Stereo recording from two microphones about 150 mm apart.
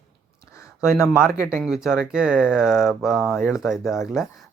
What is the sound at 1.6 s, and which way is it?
Speech, 5° right (ahead or behind).